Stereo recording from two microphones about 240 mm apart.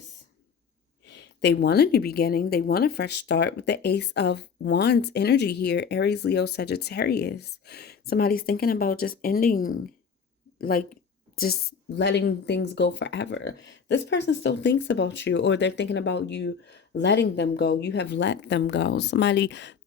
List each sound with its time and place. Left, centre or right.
1.0 s speech: left
10.6 s speech: left